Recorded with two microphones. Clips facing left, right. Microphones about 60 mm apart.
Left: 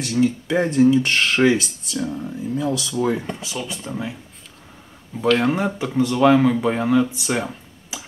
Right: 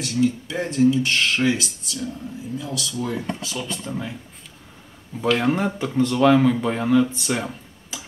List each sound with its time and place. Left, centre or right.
0.2 s speech: left
2.7 s speech: left
3.5 s speech: centre
5.2 s speech: centre